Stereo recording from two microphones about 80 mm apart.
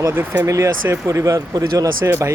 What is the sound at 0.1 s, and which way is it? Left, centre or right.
Speech, right.